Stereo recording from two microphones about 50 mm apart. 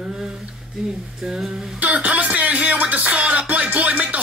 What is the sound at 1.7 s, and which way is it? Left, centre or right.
Music, right.